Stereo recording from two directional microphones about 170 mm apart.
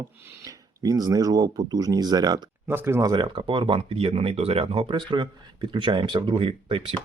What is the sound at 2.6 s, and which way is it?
Speech, 15° right (ahead or behind).